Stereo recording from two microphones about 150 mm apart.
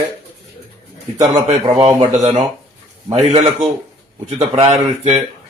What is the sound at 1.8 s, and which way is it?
A man's voice, 40° right (ahead or behind).